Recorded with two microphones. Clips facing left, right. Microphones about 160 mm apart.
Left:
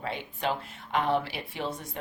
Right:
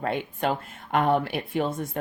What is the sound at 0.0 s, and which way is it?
Speech, 50° right (ahead or behind).